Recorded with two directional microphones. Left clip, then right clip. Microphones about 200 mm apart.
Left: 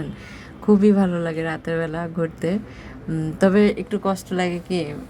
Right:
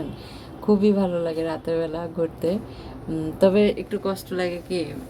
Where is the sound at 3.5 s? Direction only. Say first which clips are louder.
Left 1 dB; 20° left (ahead or behind).